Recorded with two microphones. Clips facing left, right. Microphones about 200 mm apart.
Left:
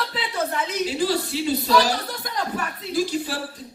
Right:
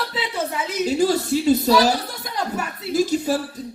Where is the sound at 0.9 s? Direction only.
45° right (ahead or behind).